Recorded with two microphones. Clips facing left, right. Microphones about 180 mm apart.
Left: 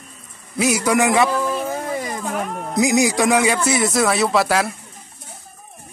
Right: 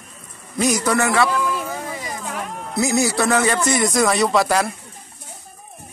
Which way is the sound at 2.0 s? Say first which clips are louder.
Left 4 dB; 50° left (ahead or behind).